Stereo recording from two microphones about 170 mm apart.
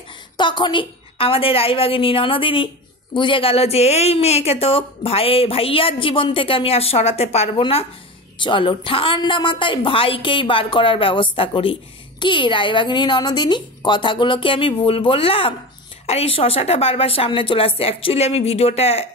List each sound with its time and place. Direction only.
0.4 s a woman's voice: 25° left (ahead or behind)